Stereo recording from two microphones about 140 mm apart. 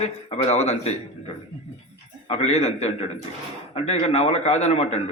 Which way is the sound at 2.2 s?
50° left (ahead or behind).